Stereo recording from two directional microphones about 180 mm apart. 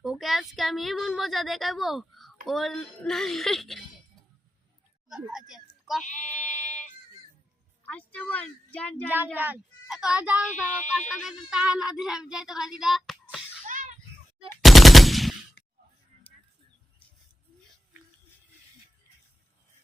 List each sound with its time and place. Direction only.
0.0 s speech: centre (ahead or behind)
5.0 s a child's voice: 5° right (ahead or behind)
6.1 s sheep: 45° left (ahead or behind)
7.9 s speech: 10° left (ahead or behind)
9.0 s speech: 10° right (ahead or behind)
13.2 s a sound: 5° right (ahead or behind)
13.7 s a sound: 45° right (ahead or behind)
14.6 s machine gun: centre (ahead or behind)